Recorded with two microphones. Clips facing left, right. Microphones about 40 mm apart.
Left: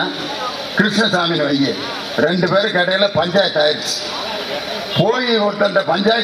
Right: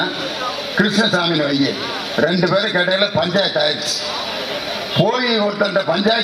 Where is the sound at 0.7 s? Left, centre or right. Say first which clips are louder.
Left 1 dB; left.